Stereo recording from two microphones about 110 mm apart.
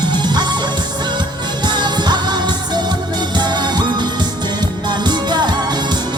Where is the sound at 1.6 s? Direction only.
40° right (ahead or behind).